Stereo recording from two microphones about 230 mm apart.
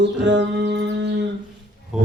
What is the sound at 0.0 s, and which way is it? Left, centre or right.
Music, right.